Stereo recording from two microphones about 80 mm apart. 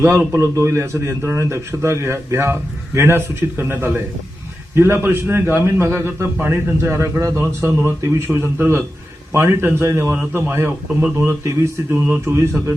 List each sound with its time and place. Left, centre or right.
0.0 s a man's voice: right